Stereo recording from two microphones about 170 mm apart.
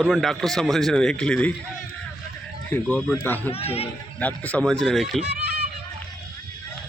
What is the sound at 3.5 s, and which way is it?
Speech, 35° left (ahead or behind).